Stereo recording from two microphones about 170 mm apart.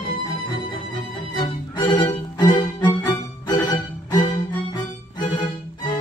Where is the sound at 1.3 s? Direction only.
25° left (ahead or behind).